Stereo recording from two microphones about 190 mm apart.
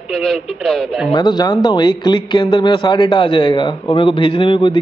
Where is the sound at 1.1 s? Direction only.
20° left (ahead or behind).